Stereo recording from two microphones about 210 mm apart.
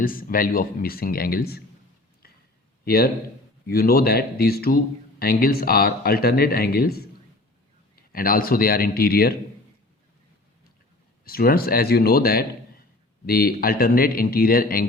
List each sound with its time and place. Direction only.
0.0 s speech: 40° left (ahead or behind)
2.8 s a man's voice: 45° left (ahead or behind)
8.1 s speech: 45° left (ahead or behind)
11.3 s speech: 45° left (ahead or behind)